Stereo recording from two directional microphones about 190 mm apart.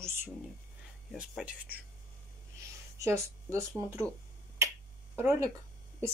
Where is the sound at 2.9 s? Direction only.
15° right (ahead or behind).